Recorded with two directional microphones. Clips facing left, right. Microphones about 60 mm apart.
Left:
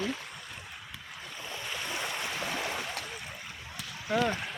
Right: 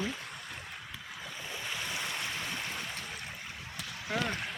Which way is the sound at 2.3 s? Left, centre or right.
Left.